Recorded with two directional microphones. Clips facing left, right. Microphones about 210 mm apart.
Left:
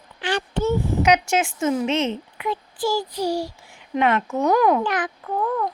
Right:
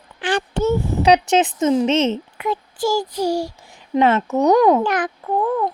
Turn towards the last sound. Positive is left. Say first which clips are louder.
# right 4 dB
turn(degrees=-30)  # may be behind; listen again after turning